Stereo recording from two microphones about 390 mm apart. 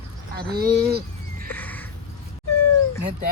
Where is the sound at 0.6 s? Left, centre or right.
Right.